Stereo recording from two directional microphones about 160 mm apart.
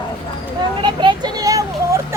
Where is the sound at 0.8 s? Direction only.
30° right (ahead or behind).